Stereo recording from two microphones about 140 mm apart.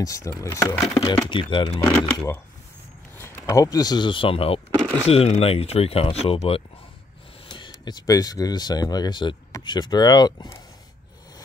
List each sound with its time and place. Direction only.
0.0 s speech: 25° left (ahead or behind)
0.9 s speech: 40° left (ahead or behind)
1.8 s speech: 20° left (ahead or behind); by 4.6 s 40° left (ahead or behind)
4.6 s a sound: 25° right (ahead or behind)
5.0 s speech: 45° left (ahead or behind)
7.4 s speech: 35° left (ahead or behind)